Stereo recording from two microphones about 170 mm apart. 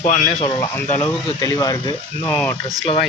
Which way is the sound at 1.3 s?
20° left (ahead or behind).